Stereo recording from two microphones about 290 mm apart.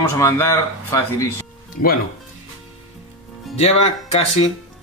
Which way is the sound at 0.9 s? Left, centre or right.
Centre.